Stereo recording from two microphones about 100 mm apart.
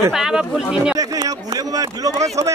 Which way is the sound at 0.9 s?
40° right (ahead or behind).